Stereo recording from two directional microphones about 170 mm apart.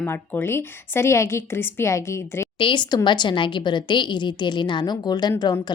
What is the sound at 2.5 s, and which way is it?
A woman's voice, 30° left (ahead or behind).